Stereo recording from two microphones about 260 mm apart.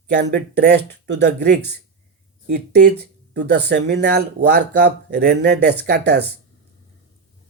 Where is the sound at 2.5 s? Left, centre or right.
Right.